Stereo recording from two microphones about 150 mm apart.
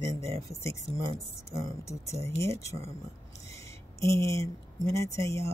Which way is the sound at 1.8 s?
20° left (ahead or behind).